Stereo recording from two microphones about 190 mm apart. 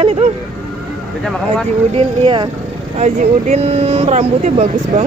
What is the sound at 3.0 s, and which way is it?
Speech, 40° right (ahead or behind).